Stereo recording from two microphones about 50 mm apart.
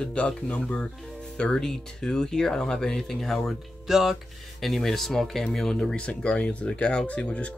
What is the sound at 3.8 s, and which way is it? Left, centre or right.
Speech, centre.